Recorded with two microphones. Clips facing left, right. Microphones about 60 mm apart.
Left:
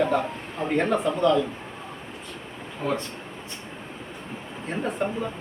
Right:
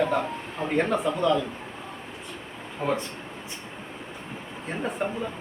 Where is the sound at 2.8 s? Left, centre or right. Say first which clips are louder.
Even; right.